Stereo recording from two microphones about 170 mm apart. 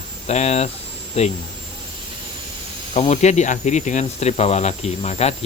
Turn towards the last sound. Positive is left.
turn(degrees=40)  # may be behind; listen again after turning